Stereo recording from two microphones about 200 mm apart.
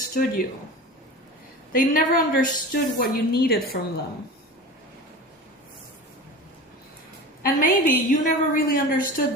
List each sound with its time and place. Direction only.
0.1 s a woman's voice: 45° left (ahead or behind)
1.7 s a woman's voice: 45° left (ahead or behind)
7.4 s a woman's voice: 45° left (ahead or behind)